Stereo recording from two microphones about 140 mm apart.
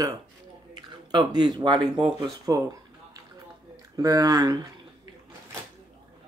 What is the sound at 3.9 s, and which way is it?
Speech, 25° right (ahead or behind).